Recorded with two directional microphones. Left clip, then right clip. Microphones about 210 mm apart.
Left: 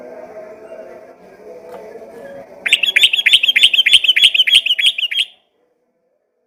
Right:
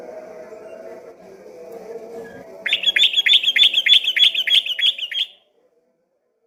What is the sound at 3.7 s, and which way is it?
Chirp, 15° left (ahead or behind).